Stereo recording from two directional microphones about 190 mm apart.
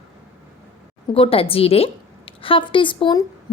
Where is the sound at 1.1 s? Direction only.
30° left (ahead or behind).